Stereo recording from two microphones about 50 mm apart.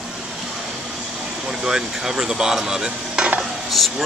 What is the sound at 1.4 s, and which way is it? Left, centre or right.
Stir, centre.